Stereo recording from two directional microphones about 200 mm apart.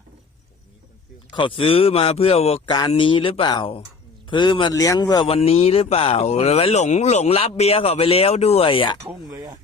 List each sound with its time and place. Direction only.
1.3 s a man's voice: 25° left (ahead or behind)
9.0 s speech: 15° right (ahead or behind)